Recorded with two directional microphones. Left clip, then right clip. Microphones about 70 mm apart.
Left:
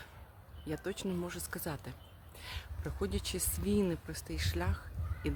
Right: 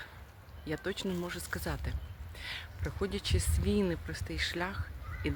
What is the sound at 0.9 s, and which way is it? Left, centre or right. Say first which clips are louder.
Speech: right 2 dB; left.